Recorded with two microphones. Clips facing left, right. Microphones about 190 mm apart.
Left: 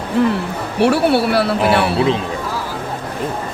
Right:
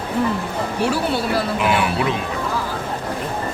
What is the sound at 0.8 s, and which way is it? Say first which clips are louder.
Speech: left 8 dB; 65° left (ahead or behind).